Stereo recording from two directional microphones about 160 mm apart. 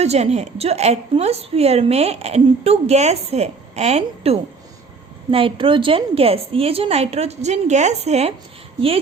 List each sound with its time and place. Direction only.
0.0 s a woman's voice: 40° right (ahead or behind)